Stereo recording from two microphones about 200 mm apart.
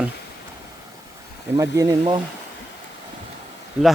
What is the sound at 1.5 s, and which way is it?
Speech, 15° right (ahead or behind).